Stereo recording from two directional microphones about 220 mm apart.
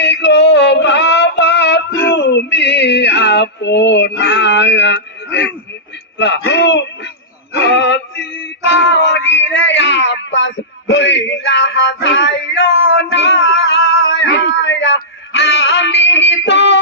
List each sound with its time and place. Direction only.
0.0 s synthetic singing: 50° left (ahead or behind)
6.1 s speech: 50° left (ahead or behind)
7.6 s music: 50° left (ahead or behind)
8.6 s a sound: 50° left (ahead or behind)
9.3 s a man's voice: 55° left (ahead or behind)
13.0 s music: 50° left (ahead or behind)